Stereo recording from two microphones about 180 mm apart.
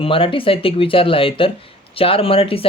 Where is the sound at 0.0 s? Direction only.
30° left (ahead or behind).